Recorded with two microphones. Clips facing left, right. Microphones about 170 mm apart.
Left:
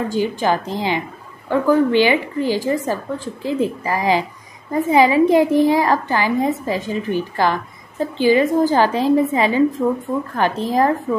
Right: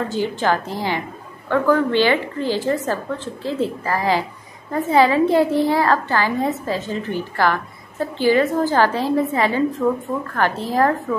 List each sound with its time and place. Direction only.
0.1 s a woman's voice: 15° left (ahead or behind)
9.8 s speech: 5° left (ahead or behind)
10.3 s a woman's voice: 15° left (ahead or behind)